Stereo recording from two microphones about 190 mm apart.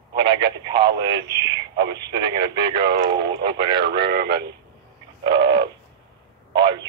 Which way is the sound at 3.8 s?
60° right (ahead or behind).